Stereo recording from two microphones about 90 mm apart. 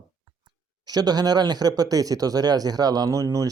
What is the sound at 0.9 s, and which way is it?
Speech, 45° right (ahead or behind).